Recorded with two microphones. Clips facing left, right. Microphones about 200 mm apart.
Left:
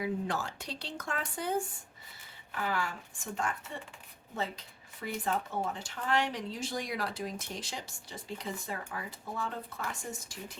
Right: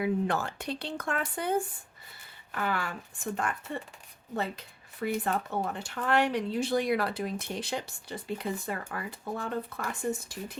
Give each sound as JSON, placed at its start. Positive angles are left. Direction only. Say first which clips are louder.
{"t": 0.0, "sound": "speech", "louder": "right 5 dB", "side_deg": -60}